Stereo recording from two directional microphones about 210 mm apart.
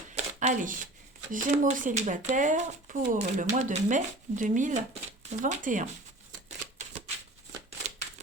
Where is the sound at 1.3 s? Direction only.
40° right (ahead or behind).